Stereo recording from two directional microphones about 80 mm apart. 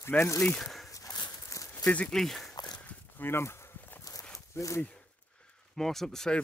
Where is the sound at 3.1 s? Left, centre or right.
Left.